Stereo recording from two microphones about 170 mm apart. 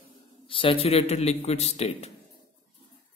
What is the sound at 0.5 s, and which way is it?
A man's voice, 30° left (ahead or behind).